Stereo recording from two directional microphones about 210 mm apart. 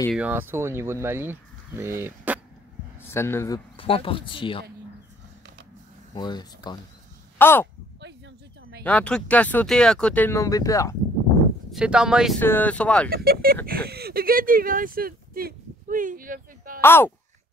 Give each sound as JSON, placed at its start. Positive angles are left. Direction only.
{"t": 0.1, "sound": "speech", "side_deg": -5}
{"t": 3.0, "sound": "speech", "side_deg": 10}
{"t": 3.7, "sound": "speech", "side_deg": 25}
{"t": 6.1, "sound": "speech", "side_deg": 20}
{"t": 7.3, "sound": "speech", "side_deg": 10}
{"t": 8.8, "sound": "speech", "side_deg": 5}
{"t": 11.7, "sound": "speech", "side_deg": -5}
{"t": 12.4, "sound": "speech", "side_deg": 10}
{"t": 13.1, "sound": "speech", "side_deg": -45}
{"t": 16.8, "sound": "speech", "side_deg": 10}